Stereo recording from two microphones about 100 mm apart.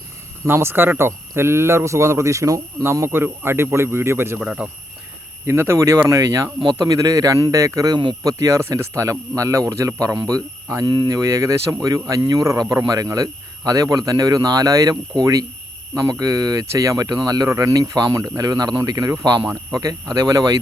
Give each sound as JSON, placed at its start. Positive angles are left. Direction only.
{"t": 0.4, "sound": "speech", "side_deg": -20}
{"t": 4.4, "sound": "speech", "side_deg": -15}
{"t": 5.5, "sound": "speech", "side_deg": -25}
{"t": 10.8, "sound": "speech", "side_deg": -45}